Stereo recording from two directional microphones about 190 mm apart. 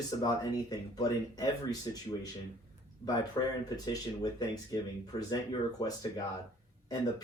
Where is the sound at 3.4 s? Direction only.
20° left (ahead or behind).